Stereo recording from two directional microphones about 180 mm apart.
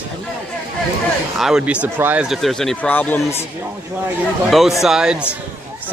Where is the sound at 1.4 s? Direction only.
5° right (ahead or behind).